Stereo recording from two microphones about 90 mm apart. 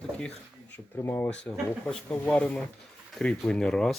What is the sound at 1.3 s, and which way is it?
Speech, 10° left (ahead or behind).